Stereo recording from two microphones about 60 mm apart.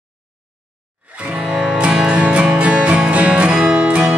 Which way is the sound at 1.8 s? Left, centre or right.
Centre.